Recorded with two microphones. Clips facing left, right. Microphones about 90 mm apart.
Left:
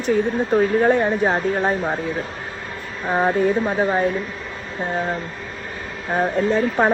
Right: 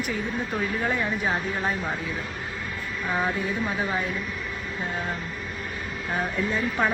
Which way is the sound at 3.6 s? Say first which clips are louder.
Left 8 dB; 35° left (ahead or behind).